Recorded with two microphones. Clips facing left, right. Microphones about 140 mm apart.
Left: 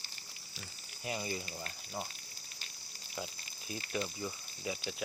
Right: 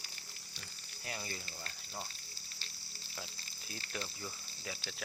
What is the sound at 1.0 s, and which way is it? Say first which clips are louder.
Speech: left 6 dB; 15° left (ahead or behind).